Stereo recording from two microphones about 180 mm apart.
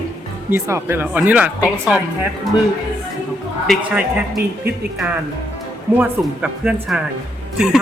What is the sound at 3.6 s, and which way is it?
Speech, centre (ahead or behind).